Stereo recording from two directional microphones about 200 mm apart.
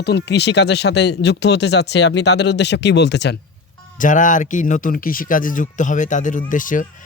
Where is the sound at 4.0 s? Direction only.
40° left (ahead or behind).